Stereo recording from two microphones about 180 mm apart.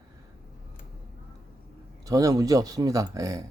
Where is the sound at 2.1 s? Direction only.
20° right (ahead or behind).